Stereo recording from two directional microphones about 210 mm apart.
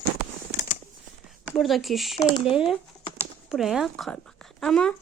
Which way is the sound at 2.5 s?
Centre (ahead or behind).